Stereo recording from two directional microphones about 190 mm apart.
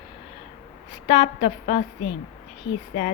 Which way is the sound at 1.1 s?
35° left (ahead or behind).